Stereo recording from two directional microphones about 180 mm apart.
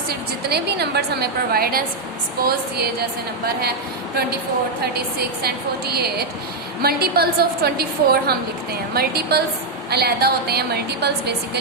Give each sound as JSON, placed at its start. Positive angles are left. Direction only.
{"t": 0.1, "sound": "a woman's voice", "side_deg": -60}
{"t": 5.9, "sound": "a woman's voice", "side_deg": -60}